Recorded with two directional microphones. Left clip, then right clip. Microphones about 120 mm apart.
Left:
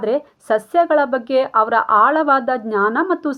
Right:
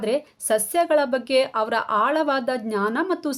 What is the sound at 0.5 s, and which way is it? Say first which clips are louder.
Speech: left 5 dB; 10° left (ahead or behind).